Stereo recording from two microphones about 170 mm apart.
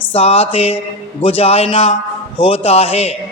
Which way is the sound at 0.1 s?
35° left (ahead or behind).